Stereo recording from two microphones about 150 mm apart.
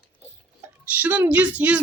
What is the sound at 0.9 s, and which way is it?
Speech, 10° right (ahead or behind).